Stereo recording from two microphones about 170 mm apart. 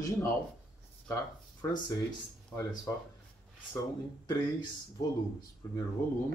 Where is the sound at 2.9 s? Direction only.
20° left (ahead or behind).